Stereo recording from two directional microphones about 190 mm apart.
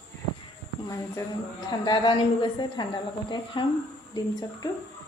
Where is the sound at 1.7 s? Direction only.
25° left (ahead or behind).